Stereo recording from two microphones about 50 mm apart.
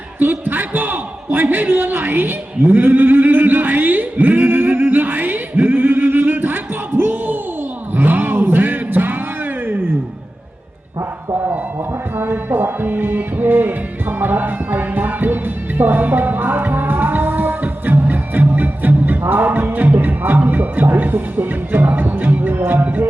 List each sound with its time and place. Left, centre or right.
0.2 s a man's voice: right
7.9 s vehicle: right
12.1 s a man's voice: right
14.2 s music: right